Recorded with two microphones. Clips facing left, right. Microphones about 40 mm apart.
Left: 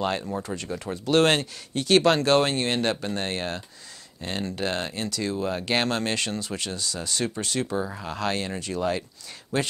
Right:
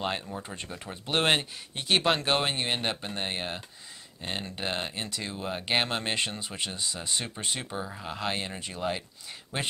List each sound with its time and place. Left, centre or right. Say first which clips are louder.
0.5 s speech: left 7 dB; centre
1.0 s speech: left 5 dB; right